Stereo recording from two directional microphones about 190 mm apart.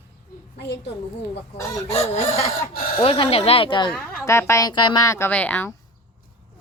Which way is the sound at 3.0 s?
30° left (ahead or behind).